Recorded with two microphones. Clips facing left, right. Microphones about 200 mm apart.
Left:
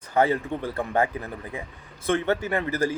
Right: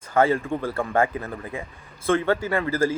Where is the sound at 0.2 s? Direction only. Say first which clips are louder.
Right 2 dB; 20° left (ahead or behind).